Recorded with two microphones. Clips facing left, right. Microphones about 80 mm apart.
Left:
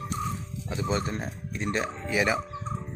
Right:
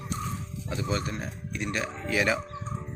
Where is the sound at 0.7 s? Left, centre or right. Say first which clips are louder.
Left 2 dB; left.